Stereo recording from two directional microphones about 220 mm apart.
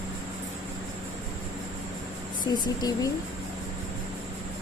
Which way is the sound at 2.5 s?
15° left (ahead or behind).